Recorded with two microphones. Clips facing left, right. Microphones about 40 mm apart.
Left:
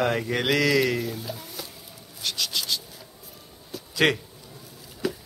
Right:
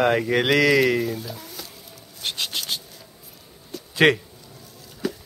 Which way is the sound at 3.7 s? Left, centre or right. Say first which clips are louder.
Right 2 dB; centre.